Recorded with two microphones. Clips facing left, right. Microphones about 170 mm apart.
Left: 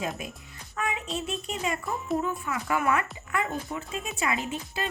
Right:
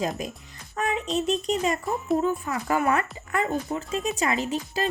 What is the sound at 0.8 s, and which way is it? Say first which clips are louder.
Music: right 4 dB; 40° right (ahead or behind).